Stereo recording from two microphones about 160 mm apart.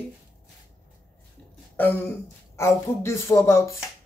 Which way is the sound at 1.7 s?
10° left (ahead or behind).